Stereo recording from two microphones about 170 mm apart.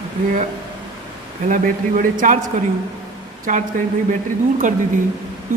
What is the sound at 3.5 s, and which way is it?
Speech, 50° right (ahead or behind).